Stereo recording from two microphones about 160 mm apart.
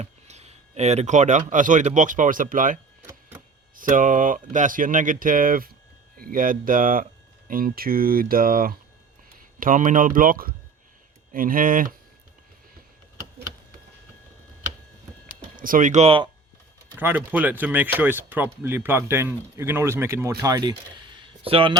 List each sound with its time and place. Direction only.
0.0 s speech: 45° right (ahead or behind)
3.8 s speech: 55° right (ahead or behind)
15.5 s speech: 60° right (ahead or behind); by 16.3 s 35° right (ahead or behind)
17.0 s speech: 10° right (ahead or behind); by 21.8 s 35° right (ahead or behind)